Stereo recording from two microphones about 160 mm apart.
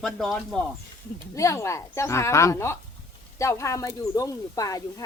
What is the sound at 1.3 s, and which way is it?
Speech, 20° left (ahead or behind).